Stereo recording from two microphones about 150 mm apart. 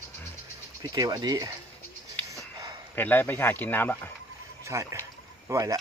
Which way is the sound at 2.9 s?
15° left (ahead or behind).